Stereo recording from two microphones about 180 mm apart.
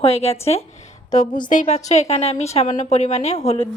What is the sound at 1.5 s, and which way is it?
A woman's voice, 40° left (ahead or behind).